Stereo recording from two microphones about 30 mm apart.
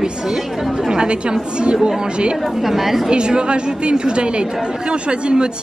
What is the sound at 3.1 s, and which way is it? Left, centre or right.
Speech, right.